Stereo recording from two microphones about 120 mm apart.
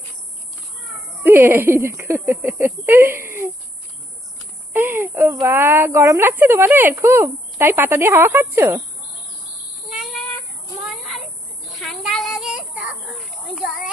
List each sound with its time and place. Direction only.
1.2 s speech: 20° right (ahead or behind)
4.7 s speech: 20° right (ahead or behind)
9.9 s a sound: centre (ahead or behind)
11.8 s child singing: centre (ahead or behind)
13.1 s children playing: centre (ahead or behind)